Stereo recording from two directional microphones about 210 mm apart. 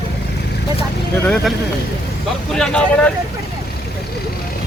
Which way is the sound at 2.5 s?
5° left (ahead or behind).